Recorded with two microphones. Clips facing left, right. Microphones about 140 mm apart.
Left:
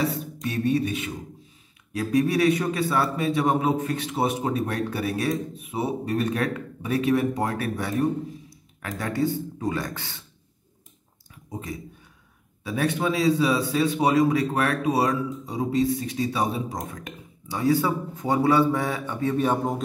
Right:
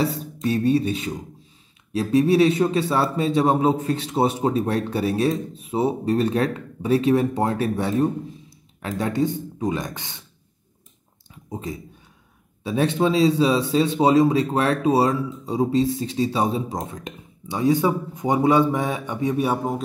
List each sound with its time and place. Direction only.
0.0 s music: 30° right (ahead or behind)
1.9 s speech: 25° right (ahead or behind)
12.6 s speech: 25° right (ahead or behind); by 19.8 s 5° right (ahead or behind)